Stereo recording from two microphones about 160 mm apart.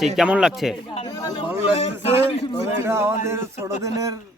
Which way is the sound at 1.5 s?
40° left (ahead or behind).